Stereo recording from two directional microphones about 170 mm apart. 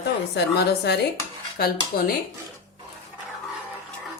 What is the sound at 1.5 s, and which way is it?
Speech, 65° left (ahead or behind).